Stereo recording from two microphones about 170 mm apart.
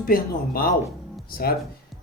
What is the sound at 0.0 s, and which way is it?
Speech, 60° left (ahead or behind).